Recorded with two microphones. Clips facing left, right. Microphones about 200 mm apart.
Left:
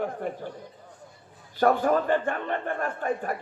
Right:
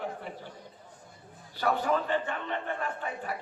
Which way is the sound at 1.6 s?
50° left (ahead or behind).